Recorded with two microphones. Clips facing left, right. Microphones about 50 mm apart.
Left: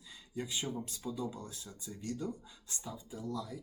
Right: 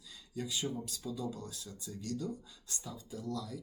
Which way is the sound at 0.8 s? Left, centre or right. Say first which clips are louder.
Left 1 dB; left.